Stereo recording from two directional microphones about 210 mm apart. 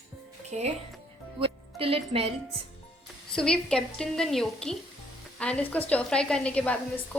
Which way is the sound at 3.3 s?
5° left (ahead or behind).